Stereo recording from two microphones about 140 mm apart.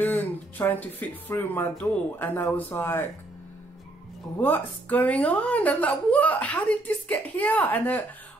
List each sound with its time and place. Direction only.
0.0 s speech: 10° left (ahead or behind)
4.4 s speech: 10° left (ahead or behind)